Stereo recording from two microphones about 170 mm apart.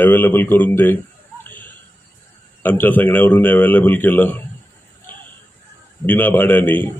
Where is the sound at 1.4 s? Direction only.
10° left (ahead or behind).